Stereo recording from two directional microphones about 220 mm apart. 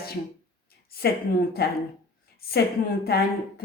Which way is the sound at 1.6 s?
45° left (ahead or behind).